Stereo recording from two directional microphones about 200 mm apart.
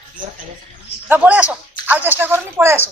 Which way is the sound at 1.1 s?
5° right (ahead or behind).